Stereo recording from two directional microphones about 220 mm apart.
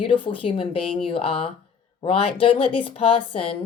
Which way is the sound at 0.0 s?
25° left (ahead or behind).